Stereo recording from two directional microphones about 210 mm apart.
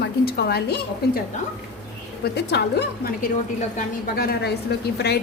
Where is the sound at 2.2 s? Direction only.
50° left (ahead or behind).